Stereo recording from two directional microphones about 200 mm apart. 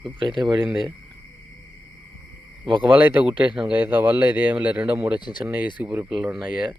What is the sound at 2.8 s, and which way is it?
Speech, 10° right (ahead or behind).